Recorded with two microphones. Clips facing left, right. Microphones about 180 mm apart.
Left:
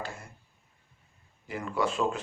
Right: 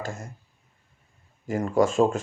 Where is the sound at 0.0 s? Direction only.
45° right (ahead or behind).